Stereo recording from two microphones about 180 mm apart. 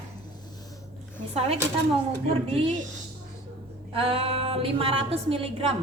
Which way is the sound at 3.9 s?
30° right (ahead or behind).